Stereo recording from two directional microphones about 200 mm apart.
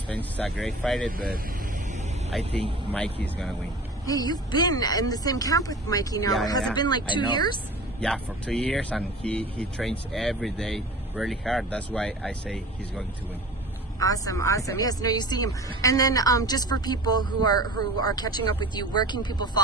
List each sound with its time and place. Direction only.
0.1 s speech: 5° left (ahead or behind)
2.3 s speech: centre (ahead or behind)
4.0 s speech: 20° left (ahead or behind)
8.0 s speech: 5° left (ahead or behind)
13.9 s speech: 15° left (ahead or behind)